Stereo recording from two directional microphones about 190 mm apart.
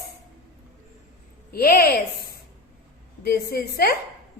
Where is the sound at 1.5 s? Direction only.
55° left (ahead or behind).